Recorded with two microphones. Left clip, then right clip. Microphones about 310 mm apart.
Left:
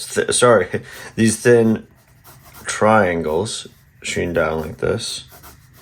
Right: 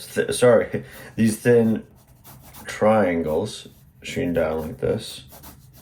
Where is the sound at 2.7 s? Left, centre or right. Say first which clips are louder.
Left 4 dB; left.